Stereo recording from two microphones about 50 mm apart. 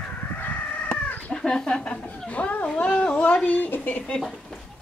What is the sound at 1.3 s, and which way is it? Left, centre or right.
A child's voice, centre.